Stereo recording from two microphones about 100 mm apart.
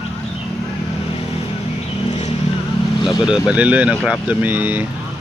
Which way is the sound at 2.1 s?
90° left.